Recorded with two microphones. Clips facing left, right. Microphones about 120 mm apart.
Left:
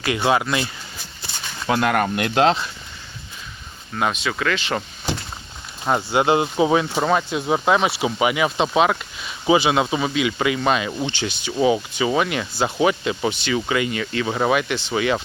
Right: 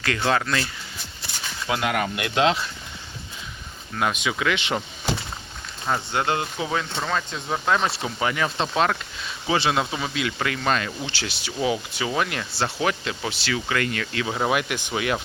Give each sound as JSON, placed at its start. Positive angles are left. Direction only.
{"t": 0.0, "sound": "speech", "side_deg": 15}
{"t": 1.6, "sound": "speech", "side_deg": 50}
{"t": 4.1, "sound": "speech", "side_deg": -10}
{"t": 6.1, "sound": "speech", "side_deg": 20}
{"t": 7.8, "sound": "speech", "side_deg": 5}
{"t": 11.2, "sound": "speech", "side_deg": -5}